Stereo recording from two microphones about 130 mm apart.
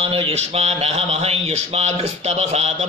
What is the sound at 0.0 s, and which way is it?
Speech, 45° right (ahead or behind).